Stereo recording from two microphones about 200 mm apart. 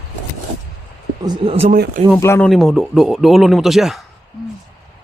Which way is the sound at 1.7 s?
45° right (ahead or behind).